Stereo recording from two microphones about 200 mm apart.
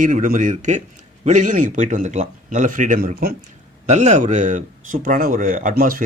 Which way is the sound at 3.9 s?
35° right (ahead or behind).